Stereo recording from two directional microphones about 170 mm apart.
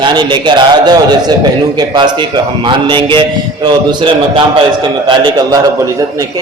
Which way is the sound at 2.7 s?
30° right (ahead or behind).